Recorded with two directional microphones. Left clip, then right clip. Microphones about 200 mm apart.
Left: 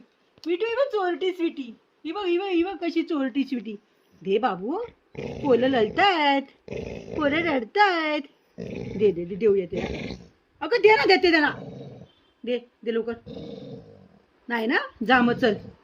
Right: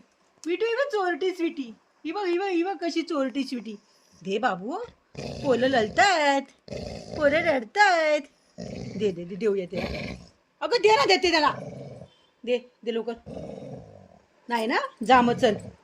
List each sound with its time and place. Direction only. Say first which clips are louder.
0.5 s a woman's voice: left 1 dB; centre (ahead or behind); by 4.8 s 20° left (ahead or behind)
4.9 s dog: left 2 dB; centre (ahead or behind)
5.5 s speech: left 2 dB; 20° left (ahead or behind)
9.7 s a woman's voice: left 1 dB; 5° left (ahead or behind)
10.6 s speech: left 2 dB; 20° left (ahead or behind)
11.6 s speech: right 1 dB; 5° right (ahead or behind)
12.5 s speech: right 1 dB; 20° left (ahead or behind)
14.4 s speech: left 1 dB; 20° left (ahead or behind)